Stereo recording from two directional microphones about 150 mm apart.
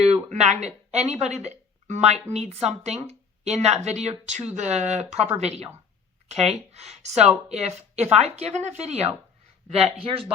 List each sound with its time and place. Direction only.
0.1 s speech: 50° right (ahead or behind)